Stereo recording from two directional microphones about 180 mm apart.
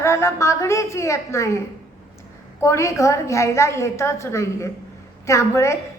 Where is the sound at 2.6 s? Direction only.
15° left (ahead or behind).